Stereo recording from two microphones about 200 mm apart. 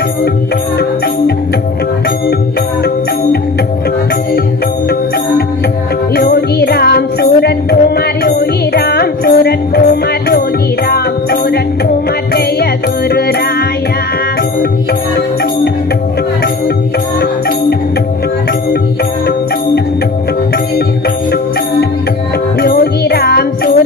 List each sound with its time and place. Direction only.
6.1 s music: 50° left (ahead or behind)
10.9 s music: 50° left (ahead or behind)
13.1 s music: 50° left (ahead or behind)
22.6 s music: 50° left (ahead or behind)